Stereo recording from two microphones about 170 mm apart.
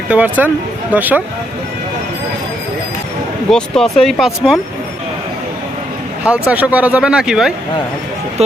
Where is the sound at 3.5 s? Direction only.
5° left (ahead or behind).